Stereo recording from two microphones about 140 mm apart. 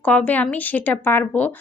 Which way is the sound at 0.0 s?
10° left (ahead or behind).